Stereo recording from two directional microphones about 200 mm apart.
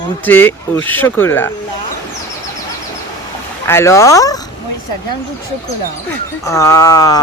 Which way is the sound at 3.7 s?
15° left (ahead or behind).